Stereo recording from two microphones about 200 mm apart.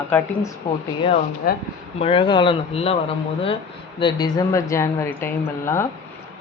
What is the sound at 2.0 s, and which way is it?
Speech, 25° left (ahead or behind).